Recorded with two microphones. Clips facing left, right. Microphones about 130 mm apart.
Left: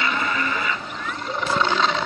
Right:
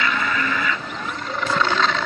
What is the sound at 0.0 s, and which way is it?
Vehicle, 30° left (ahead or behind).